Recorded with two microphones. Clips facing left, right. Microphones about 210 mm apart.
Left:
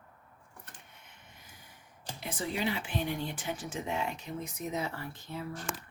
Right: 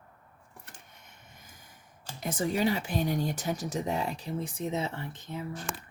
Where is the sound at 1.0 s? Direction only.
45° right (ahead or behind).